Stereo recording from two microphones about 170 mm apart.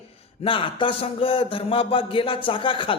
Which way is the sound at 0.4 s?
30° left (ahead or behind).